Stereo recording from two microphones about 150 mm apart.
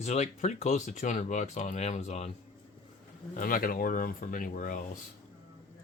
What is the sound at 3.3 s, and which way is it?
Speech, 65° left (ahead or behind).